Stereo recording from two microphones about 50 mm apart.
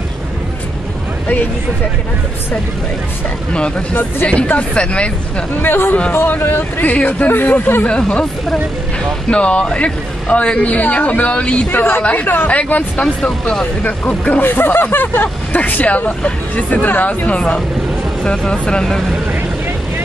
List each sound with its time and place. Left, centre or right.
1.2 s speech: left
3.5 s speech: centre
5.6 s speech: left
6.8 s speech: left
7.9 s speech: left
9.3 s speech: left
11.7 s speech: left
12.0 s speech: left
13.0 s speech: centre
13.8 s speech: left
14.4 s speech: left
17.4 s speech: centre